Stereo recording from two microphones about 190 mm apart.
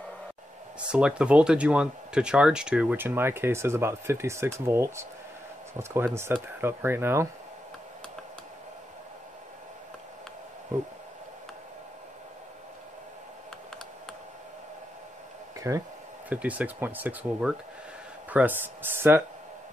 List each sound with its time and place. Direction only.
0.7 s speech: 5° right (ahead or behind)
15.7 s speech: 15° right (ahead or behind)